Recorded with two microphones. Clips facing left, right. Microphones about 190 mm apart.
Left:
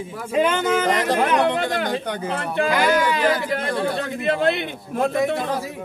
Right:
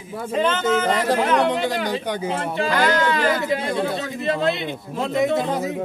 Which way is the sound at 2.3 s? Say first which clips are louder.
Left 5 dB; 55° left (ahead or behind).